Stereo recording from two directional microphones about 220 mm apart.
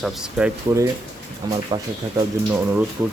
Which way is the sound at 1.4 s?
20° right (ahead or behind).